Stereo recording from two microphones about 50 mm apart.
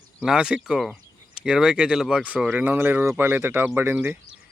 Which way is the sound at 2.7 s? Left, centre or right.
Right.